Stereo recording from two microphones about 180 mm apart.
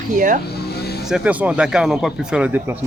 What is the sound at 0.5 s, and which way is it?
Vehicle, 65° left (ahead or behind).